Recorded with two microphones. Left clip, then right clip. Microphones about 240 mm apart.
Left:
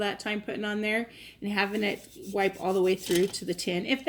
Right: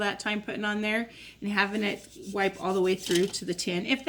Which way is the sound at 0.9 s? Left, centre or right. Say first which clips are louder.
Even; right.